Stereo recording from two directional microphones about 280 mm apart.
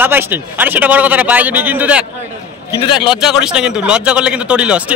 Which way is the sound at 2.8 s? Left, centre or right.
Centre.